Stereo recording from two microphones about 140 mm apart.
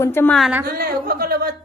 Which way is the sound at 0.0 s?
15° left (ahead or behind).